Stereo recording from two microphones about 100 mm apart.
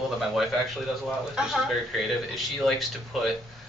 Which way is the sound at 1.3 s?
Centre (ahead or behind).